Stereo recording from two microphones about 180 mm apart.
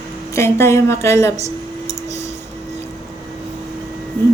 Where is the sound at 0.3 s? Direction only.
15° left (ahead or behind).